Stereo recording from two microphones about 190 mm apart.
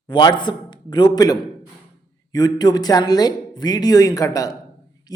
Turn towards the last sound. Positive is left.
turn(degrees=20)  # may be behind; listen again after turning